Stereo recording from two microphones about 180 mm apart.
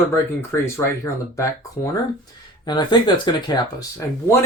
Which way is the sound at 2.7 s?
25° left (ahead or behind).